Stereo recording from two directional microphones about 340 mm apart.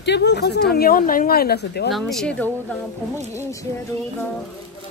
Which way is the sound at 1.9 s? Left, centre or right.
Centre.